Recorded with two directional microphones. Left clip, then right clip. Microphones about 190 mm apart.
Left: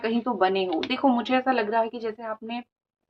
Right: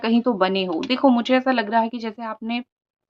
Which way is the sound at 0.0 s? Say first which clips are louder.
Right 4 dB; 45° right (ahead or behind).